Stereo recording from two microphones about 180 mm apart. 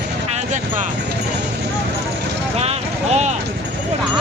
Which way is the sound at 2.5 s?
35° right (ahead or behind).